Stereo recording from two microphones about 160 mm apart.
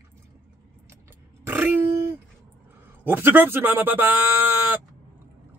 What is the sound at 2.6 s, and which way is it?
Speech, 10° right (ahead or behind).